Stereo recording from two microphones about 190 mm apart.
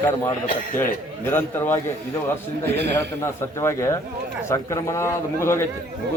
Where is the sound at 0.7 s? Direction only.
10° left (ahead or behind).